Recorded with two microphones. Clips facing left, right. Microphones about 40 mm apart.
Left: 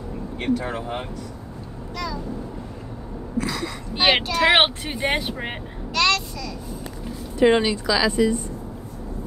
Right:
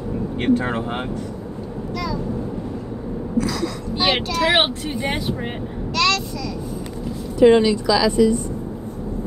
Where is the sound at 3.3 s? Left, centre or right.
Left.